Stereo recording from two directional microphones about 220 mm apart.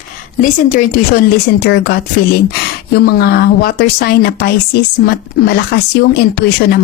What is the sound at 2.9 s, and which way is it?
Speech, 45° left (ahead or behind).